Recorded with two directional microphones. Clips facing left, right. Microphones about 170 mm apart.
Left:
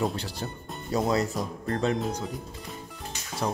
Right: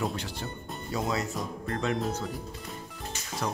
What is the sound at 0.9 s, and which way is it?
Speech, 35° left (ahead or behind).